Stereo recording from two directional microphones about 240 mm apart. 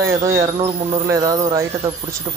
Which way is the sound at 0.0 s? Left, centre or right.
Centre.